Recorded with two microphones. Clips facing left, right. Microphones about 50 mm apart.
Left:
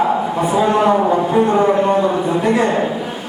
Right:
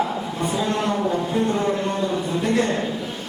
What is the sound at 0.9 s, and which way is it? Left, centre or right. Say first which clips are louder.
Speech: left 8 dB; left.